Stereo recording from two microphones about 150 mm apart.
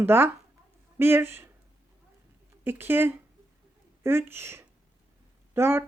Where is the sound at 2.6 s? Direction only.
15° right (ahead or behind).